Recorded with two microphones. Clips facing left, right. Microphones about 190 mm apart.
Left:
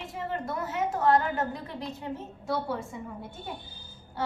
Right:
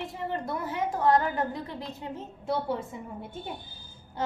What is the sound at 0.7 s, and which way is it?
Speech, 15° right (ahead or behind).